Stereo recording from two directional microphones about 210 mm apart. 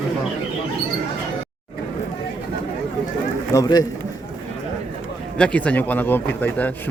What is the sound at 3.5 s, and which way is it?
Speech, 20° left (ahead or behind).